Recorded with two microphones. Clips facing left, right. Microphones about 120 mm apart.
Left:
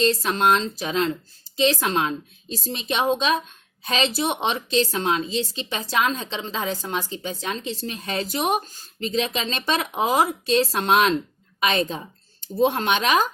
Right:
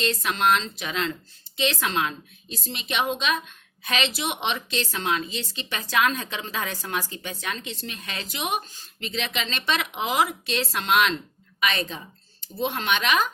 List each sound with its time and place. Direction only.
0.0 s speech: 35° left (ahead or behind)